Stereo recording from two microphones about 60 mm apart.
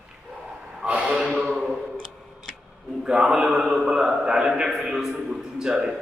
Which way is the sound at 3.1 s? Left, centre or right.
Centre.